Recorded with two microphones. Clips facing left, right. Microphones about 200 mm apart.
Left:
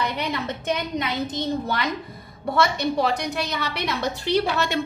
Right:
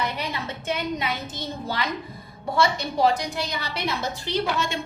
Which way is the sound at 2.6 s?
65° left (ahead or behind).